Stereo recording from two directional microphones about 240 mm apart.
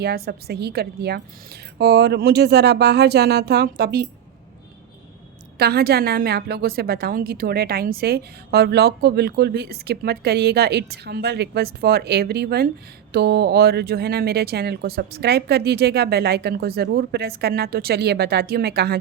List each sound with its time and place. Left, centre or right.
0.0 s a woman's voice: right
5.5 s a woman's voice: right